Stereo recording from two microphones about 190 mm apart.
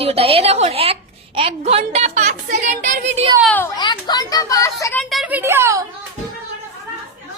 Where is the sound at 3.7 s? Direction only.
20° left (ahead or behind).